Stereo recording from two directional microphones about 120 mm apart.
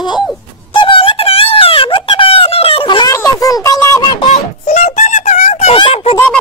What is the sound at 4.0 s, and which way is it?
Speech, 40° left (ahead or behind).